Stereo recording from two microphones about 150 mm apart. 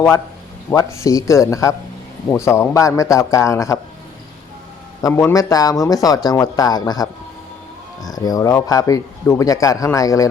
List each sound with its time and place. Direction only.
0.8 s a man's voice: 20° left (ahead or behind)
5.0 s a man's voice: 20° left (ahead or behind)
8.1 s a man's voice: 25° left (ahead or behind)